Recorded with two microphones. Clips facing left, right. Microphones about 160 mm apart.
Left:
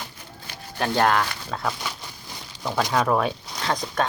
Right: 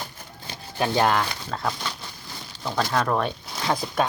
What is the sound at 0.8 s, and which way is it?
Speech, 5° right (ahead or behind).